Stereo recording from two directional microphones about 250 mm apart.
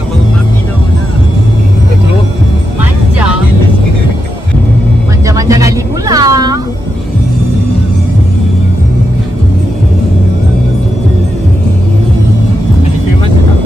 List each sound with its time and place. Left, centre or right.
5.5 s cat: centre